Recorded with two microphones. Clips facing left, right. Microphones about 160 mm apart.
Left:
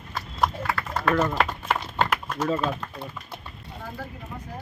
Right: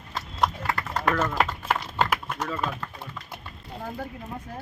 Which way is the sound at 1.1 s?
15° left (ahead or behind).